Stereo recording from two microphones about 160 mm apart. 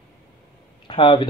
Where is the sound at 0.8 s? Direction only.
30° left (ahead or behind).